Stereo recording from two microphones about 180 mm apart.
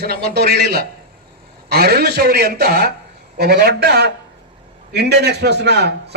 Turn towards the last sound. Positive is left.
turn(degrees=-65)  # may be behind; listen again after turning